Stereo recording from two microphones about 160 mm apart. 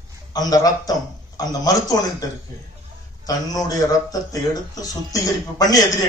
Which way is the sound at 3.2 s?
25° left (ahead or behind).